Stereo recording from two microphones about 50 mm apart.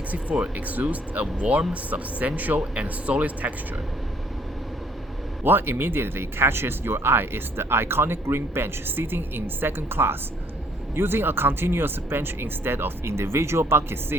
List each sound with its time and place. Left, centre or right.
0.1 s a woman's voice: right
5.4 s speech: right